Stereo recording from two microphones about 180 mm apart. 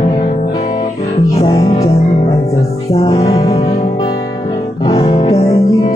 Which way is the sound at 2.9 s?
35° left (ahead or behind).